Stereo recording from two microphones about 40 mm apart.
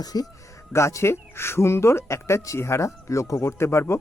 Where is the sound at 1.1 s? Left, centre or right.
Left.